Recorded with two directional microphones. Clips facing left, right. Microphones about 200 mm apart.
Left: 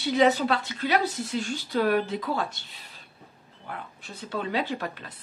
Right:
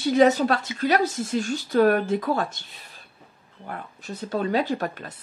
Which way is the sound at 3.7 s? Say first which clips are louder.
Right 4 dB; 45° right (ahead or behind).